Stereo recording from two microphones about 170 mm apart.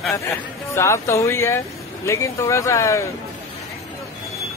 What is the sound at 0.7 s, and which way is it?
Speech, 15° left (ahead or behind).